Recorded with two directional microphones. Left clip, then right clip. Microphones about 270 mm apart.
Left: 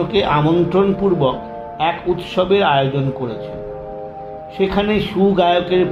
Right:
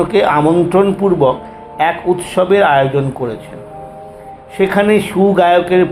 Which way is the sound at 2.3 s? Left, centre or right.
Centre.